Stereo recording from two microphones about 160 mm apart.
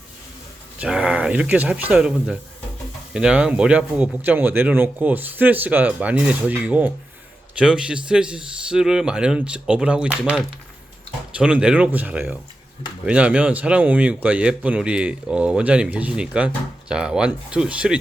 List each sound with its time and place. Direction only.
0.8 s speech: 5° right (ahead or behind)